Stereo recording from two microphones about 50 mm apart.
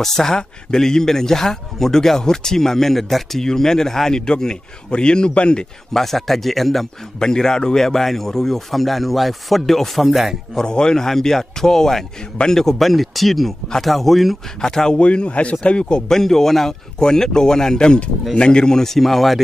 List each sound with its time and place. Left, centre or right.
0.0 s speech: centre
5.9 s speech: centre
10.5 s speech: centre
15.0 s speech: left
16.1 s speech: centre